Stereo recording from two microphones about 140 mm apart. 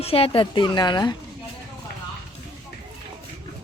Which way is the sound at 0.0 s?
45° left (ahead or behind).